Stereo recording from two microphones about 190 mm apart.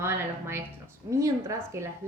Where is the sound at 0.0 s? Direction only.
15° right (ahead or behind).